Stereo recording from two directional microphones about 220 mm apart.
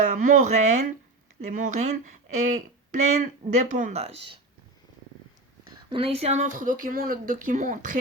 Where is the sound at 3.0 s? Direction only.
35° right (ahead or behind).